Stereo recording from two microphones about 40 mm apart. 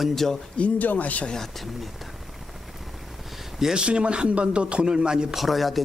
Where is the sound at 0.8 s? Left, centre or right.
Left.